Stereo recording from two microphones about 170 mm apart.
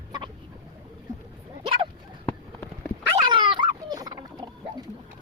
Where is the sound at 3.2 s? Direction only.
25° right (ahead or behind).